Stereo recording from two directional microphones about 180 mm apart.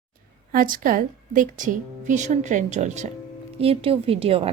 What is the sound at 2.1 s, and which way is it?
Music, 40° right (ahead or behind).